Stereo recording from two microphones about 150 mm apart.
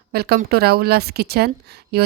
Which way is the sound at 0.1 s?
90° right.